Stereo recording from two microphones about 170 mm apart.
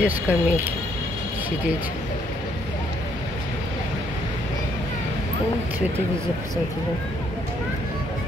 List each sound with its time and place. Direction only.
0.0 s speech: 10° right (ahead or behind)